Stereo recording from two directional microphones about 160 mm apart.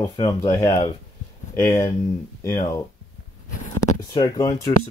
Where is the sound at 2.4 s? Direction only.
25° left (ahead or behind).